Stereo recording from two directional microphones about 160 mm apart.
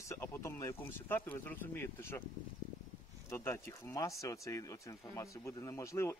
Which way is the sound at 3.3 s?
20° left (ahead or behind).